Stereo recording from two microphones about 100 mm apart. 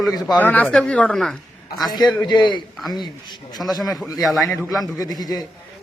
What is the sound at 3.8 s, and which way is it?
Speech, centre (ahead or behind).